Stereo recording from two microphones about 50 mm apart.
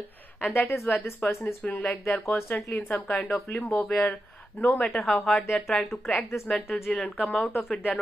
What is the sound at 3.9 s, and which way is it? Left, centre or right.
Speech, left.